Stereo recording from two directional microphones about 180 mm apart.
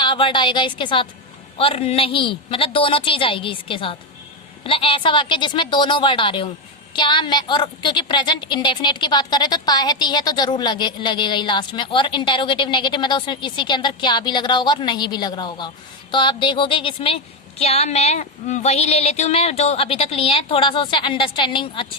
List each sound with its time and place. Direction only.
0.0 s a woman's voice: 25° left (ahead or behind)